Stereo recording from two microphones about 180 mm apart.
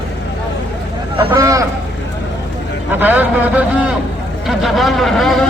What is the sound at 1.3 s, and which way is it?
Speech, 20° right (ahead or behind).